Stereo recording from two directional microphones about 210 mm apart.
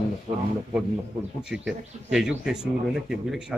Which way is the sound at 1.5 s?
5° right (ahead or behind).